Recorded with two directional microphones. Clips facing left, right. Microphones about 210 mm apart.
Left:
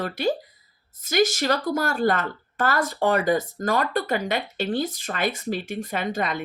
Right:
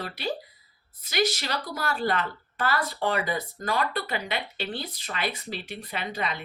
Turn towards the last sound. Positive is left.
turn(degrees=45)  # may be behind; listen again after turning